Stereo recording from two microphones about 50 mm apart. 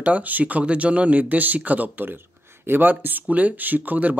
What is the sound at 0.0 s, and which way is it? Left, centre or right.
Speech, right.